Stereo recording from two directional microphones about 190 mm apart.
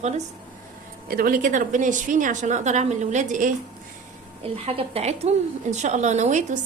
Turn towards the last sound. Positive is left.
turn(degrees=-40)  # may be behind; listen again after turning